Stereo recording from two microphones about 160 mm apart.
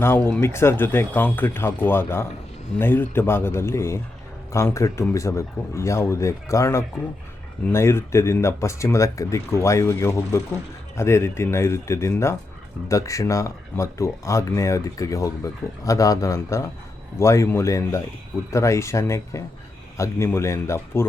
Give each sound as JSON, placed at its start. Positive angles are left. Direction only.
{"t": 0.0, "sound": "speech", "side_deg": 15}